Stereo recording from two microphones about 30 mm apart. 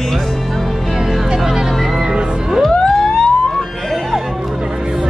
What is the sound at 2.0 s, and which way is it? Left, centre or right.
Music, right.